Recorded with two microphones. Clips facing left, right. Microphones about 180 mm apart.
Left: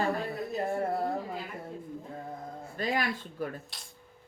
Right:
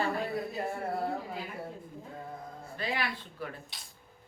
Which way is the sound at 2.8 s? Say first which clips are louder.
Left 4 dB; 45° left (ahead or behind).